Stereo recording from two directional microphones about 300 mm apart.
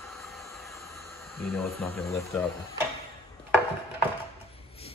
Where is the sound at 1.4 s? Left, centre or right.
Centre.